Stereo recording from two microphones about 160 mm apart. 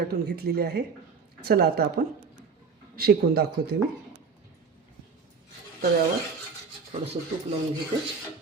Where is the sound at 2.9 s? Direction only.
75° right (ahead or behind).